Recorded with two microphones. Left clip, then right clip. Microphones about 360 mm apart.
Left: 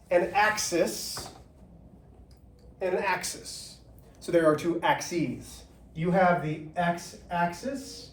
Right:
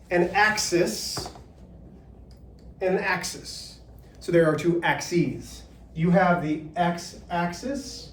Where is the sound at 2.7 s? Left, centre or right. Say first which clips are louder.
Right 3 dB; centre.